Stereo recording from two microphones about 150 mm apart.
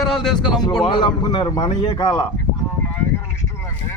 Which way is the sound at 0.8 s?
30° left (ahead or behind).